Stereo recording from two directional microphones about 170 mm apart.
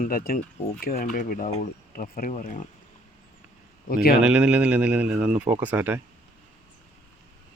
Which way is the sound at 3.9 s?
60° left (ahead or behind).